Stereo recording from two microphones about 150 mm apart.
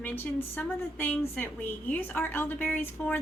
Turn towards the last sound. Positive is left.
turn(degrees=10)  # may be behind; listen again after turning